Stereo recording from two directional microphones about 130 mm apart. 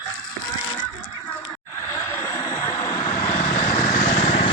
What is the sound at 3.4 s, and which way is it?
Vehicle, 55° left (ahead or behind).